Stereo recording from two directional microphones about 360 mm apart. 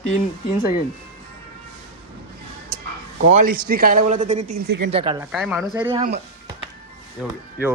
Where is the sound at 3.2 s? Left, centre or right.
Right.